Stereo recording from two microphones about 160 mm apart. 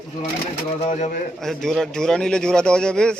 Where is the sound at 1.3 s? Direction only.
5° left (ahead or behind).